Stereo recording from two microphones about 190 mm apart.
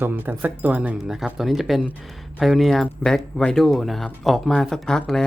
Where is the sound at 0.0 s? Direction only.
10° right (ahead or behind).